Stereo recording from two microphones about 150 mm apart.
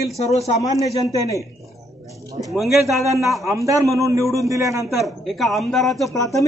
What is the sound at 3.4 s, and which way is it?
A man's voice, 20° right (ahead or behind).